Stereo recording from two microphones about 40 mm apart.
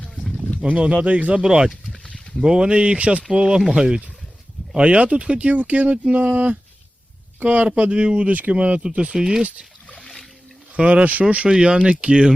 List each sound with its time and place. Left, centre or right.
0.3 s a sound: left
0.7 s speech: right
3.3 s speech: centre
4.7 s speech: right
5.5 s speech: right
8.3 s speech: right
8.5 s speech: right
9.0 s speech: centre
10.8 s speech: right
11.4 s speech: right